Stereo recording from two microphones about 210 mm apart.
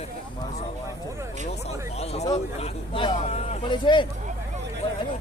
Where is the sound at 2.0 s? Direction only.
30° left (ahead or behind).